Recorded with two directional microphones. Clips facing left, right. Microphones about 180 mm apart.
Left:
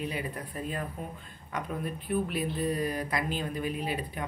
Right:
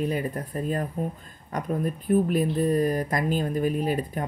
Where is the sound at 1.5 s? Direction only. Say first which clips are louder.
Right 7 dB; 45° right (ahead or behind).